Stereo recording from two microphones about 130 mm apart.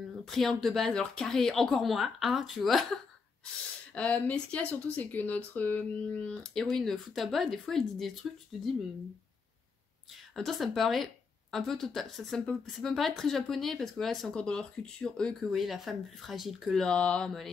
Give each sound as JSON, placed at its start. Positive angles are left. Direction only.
{"t": 0.3, "sound": "a woman's voice", "side_deg": 0}
{"t": 3.9, "sound": "speech", "side_deg": 10}
{"t": 10.3, "sound": "a woman's voice", "side_deg": 0}